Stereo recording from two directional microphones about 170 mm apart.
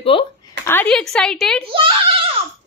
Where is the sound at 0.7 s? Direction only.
10° left (ahead or behind).